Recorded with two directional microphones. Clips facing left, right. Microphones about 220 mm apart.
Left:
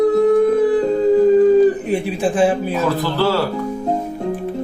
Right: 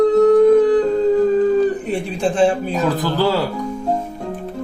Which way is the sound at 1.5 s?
10° left (ahead or behind).